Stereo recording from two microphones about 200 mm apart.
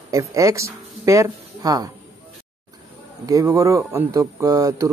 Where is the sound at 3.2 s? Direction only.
15° right (ahead or behind).